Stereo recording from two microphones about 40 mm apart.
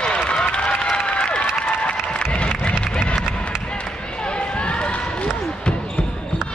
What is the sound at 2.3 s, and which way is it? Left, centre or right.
Music, left.